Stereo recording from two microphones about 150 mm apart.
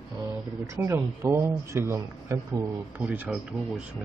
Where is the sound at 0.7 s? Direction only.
15° right (ahead or behind).